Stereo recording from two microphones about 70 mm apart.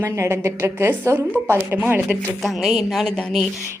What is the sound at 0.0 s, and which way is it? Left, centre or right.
A woman's voice, right.